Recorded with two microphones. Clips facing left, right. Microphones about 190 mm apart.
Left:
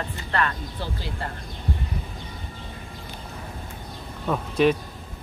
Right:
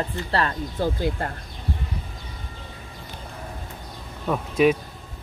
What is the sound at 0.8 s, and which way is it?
Speech, 45° right (ahead or behind).